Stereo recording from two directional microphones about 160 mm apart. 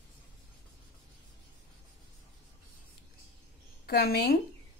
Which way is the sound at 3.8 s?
80° left.